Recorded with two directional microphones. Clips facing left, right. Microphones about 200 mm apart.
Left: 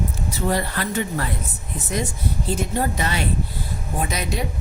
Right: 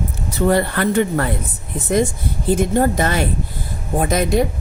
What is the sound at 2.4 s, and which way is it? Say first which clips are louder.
A woman's voice: right 9 dB; 50° right (ahead or behind).